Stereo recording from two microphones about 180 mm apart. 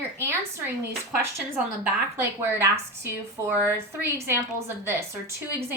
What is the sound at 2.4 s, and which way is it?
A woman's voice, 15° right (ahead or behind).